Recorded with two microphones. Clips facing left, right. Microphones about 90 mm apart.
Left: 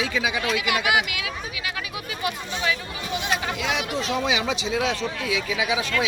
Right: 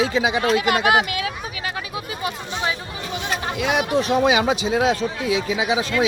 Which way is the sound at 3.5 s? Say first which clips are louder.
Right 6 dB; 50° right (ahead or behind).